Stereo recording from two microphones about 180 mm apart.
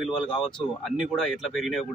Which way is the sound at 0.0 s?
5° left (ahead or behind).